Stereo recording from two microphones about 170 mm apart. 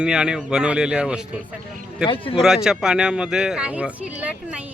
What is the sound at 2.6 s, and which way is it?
Speech, 5° right (ahead or behind).